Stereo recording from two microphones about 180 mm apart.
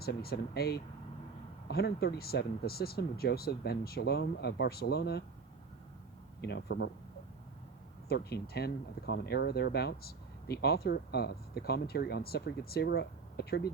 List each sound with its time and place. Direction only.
0.0 s speech: 60° left (ahead or behind)
6.4 s speech: 70° left (ahead or behind)
8.0 s speech: 60° left (ahead or behind)